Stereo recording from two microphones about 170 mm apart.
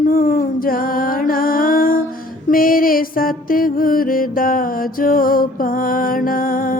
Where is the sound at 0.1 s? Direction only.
55° left (ahead or behind).